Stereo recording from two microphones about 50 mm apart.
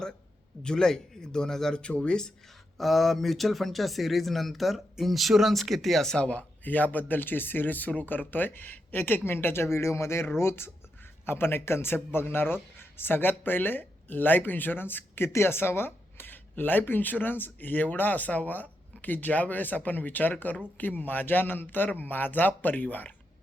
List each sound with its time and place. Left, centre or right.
0.6 s a man's voice: centre
2.7 s speech: centre
6.1 s speech: left
6.7 s speech: left
15.3 s speech: left